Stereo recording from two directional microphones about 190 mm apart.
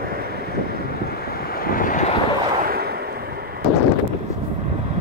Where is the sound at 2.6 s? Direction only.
55° right (ahead or behind).